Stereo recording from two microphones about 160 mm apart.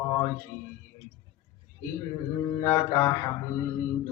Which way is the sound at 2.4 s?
20° left (ahead or behind).